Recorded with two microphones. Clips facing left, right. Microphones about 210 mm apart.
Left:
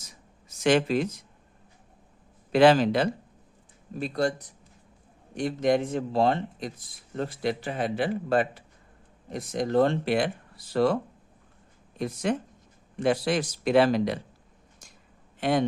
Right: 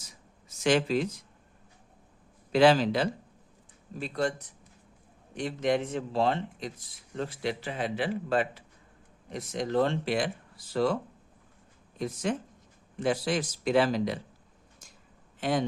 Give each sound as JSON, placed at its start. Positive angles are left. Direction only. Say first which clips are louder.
{"t": 0.6, "sound": "a man's voice", "louder": "left 3 dB", "side_deg": 55}
{"t": 2.5, "sound": "a man's voice", "louder": "left 3 dB", "side_deg": 55}
{"t": 4.0, "sound": "a man's voice", "louder": "left 3 dB", "side_deg": 40}
{"t": 11.9, "sound": "a man's voice", "louder": "left 3 dB", "side_deg": 65}
{"t": 15.4, "sound": "a man's voice", "louder": "left 4 dB", "side_deg": 65}